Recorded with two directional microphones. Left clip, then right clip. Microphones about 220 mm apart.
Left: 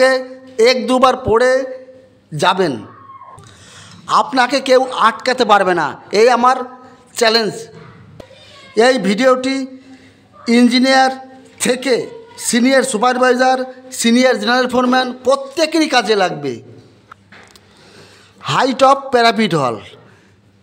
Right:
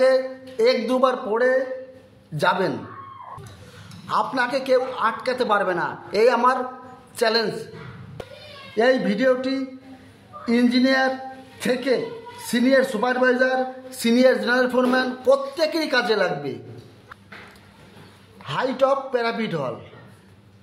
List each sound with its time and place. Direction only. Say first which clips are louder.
0.0 s a man's voice: left 5 dB; 45° left (ahead or behind)
4.1 s a man's voice: left 9 dB; 40° left (ahead or behind)
8.7 s a man's voice: left 7 dB; 55° left (ahead or behind)
18.4 s a man's voice: left 9 dB; 55° left (ahead or behind)